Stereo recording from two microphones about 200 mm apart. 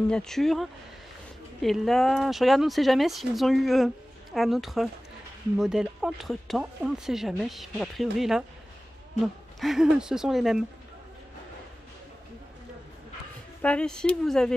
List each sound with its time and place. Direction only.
0.1 s speech: 5° left (ahead or behind)
9.6 s speech: centre (ahead or behind)
13.6 s speech: 5° left (ahead or behind)